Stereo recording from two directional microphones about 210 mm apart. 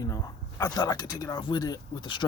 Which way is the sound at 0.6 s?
20° left (ahead or behind).